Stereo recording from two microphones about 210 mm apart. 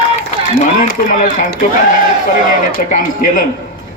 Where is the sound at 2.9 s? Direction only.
40° left (ahead or behind).